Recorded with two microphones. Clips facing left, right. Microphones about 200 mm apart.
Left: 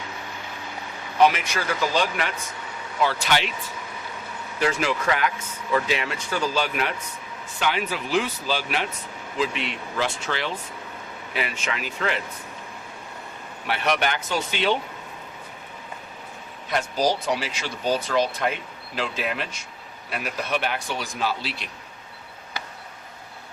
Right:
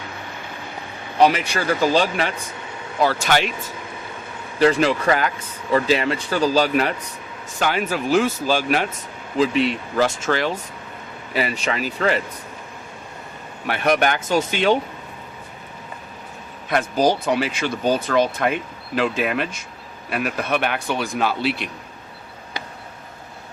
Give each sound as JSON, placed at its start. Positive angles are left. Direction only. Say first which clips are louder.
{"t": 1.2, "sound": "speech", "louder": "right 3 dB", "side_deg": -30}
{"t": 3.0, "sound": "speech", "louder": "right 4 dB", "side_deg": -45}
{"t": 4.6, "sound": "speech", "louder": "right 7 dB", "side_deg": -30}
{"t": 13.7, "sound": "speech", "louder": "right 5 dB", "side_deg": -50}
{"t": 16.6, "sound": "speech", "louder": "right 5 dB", "side_deg": -55}